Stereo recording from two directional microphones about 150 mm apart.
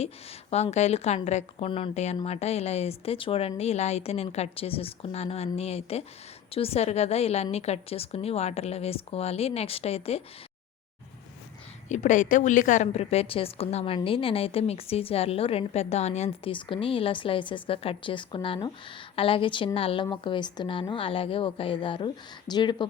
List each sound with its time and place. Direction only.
0.5 s speech: 45° left (ahead or behind)
11.9 s a woman's voice: 55° left (ahead or behind); by 22.9 s 30° left (ahead or behind)